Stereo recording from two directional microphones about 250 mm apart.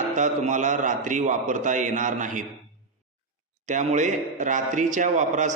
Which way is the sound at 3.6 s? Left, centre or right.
Right.